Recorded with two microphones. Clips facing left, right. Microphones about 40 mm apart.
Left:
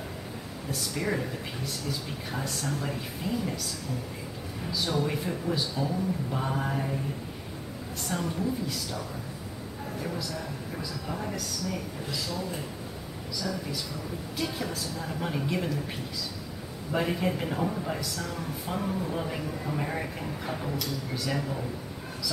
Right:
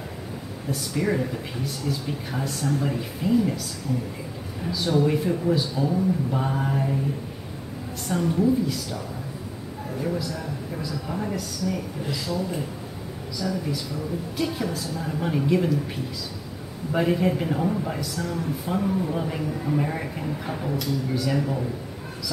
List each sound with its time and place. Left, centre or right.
0.7 s speech: centre
4.7 s speech: centre
8.1 s speech: centre
10.8 s speech: centre
13.4 s speech: centre
16.9 s speech: centre